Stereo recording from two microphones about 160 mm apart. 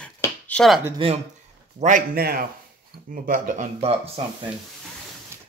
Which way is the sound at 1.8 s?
55° right (ahead or behind).